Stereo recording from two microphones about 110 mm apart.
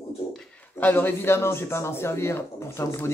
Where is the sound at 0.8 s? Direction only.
20° left (ahead or behind).